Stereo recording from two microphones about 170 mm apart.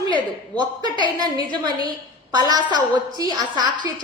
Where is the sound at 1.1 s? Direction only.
25° right (ahead or behind).